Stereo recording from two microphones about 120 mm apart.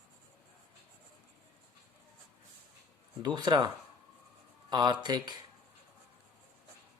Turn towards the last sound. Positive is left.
turn(degrees=-40)  # may be behind; listen again after turning